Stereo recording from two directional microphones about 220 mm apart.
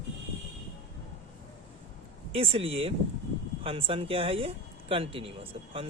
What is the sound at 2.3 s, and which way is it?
Speech, 25° right (ahead or behind).